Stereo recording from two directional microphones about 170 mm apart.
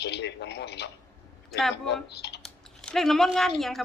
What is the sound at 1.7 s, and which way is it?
Speech, 80° left.